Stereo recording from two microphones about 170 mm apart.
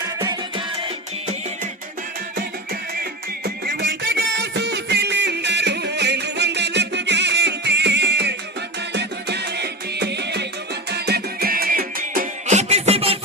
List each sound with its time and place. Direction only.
0.2 s music: 25° right (ahead or behind)
3.0 s music: 70° right (ahead or behind)
10.9 s music: 70° right (ahead or behind); by 13.1 s 35° right (ahead or behind)